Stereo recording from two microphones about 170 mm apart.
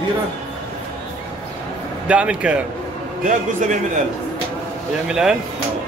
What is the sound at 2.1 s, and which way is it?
Speech, 5° right (ahead or behind).